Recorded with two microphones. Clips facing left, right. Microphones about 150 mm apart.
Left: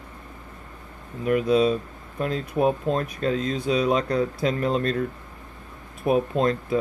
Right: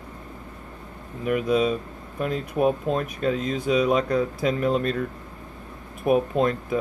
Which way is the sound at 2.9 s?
5° right (ahead or behind).